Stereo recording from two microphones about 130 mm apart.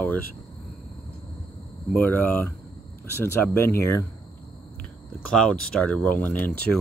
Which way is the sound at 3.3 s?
20° left (ahead or behind).